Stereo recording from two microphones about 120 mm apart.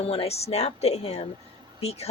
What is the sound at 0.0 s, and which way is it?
A woman's voice, 55° left (ahead or behind).